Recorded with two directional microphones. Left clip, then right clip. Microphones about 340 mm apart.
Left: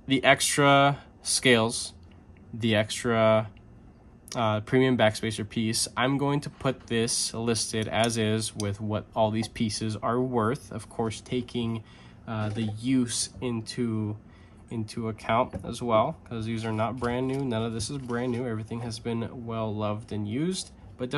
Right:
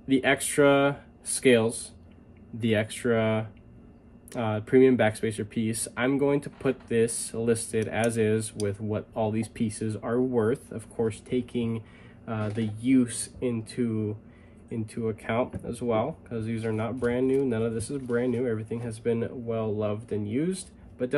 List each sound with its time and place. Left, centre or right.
0.1 s speech: centre